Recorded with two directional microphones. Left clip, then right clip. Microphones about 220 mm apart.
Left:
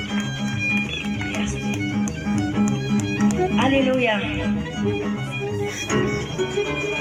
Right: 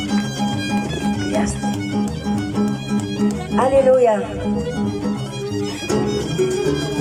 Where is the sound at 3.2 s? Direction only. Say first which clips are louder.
Right 3 dB; 25° right (ahead or behind).